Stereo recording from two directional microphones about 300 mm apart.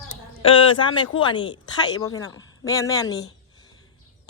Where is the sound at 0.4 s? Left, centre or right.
Centre.